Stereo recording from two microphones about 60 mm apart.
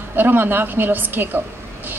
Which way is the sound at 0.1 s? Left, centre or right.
Right.